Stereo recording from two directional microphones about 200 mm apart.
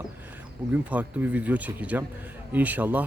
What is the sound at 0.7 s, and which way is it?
A man's voice, 10° right (ahead or behind).